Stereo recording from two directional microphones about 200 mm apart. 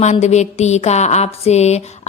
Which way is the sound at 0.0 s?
35° left (ahead or behind).